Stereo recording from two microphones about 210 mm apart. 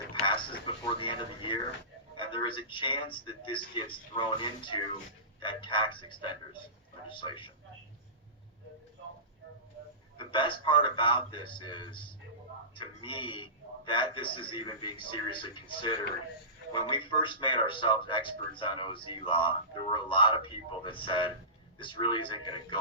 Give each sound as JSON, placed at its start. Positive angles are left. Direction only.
{"t": 0.1, "sound": "a sound", "side_deg": 25}
{"t": 0.9, "sound": "speech", "side_deg": 25}
{"t": 10.2, "sound": "speech", "side_deg": 25}